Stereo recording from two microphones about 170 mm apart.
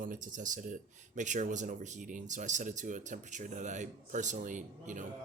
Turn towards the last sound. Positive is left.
turn(degrees=-50)  # may be behind; listen again after turning